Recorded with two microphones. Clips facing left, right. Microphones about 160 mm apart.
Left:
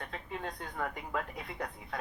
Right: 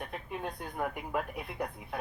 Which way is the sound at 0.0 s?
15° right (ahead or behind).